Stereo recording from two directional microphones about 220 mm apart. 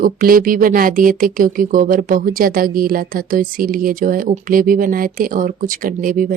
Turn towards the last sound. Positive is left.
turn(degrees=-40)  # may be behind; listen again after turning